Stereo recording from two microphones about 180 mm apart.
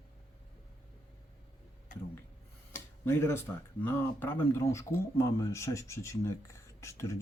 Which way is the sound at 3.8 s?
10° left (ahead or behind).